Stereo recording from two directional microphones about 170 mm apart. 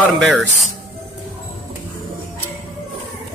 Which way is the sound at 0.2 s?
5° right (ahead or behind).